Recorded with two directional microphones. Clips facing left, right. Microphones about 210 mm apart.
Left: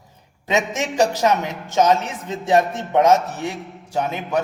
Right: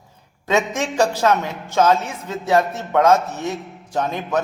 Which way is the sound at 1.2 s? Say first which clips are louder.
Right 1 dB; 20° left (ahead or behind).